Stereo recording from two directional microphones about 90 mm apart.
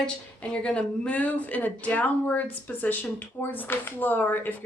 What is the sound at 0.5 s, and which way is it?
Speech, 10° left (ahead or behind).